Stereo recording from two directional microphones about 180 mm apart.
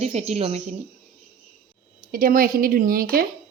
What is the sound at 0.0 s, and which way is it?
Speech, 35° right (ahead or behind).